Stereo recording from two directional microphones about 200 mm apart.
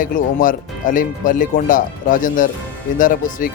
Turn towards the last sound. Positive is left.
turn(degrees=40)  # may be behind; listen again after turning